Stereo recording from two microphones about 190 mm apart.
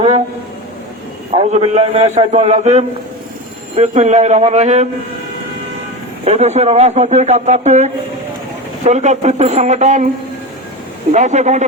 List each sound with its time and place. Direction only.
1.4 s a man's voice: 35° right (ahead or behind)
6.2 s a man's voice: 35° right (ahead or behind)
11.1 s a man's voice: 40° right (ahead or behind)